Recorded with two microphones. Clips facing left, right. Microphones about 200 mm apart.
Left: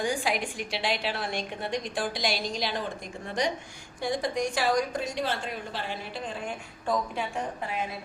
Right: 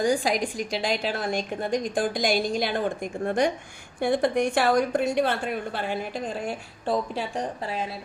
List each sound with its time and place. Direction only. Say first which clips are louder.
0.0 s a woman's voice: right 5 dB; 40° right (ahead or behind)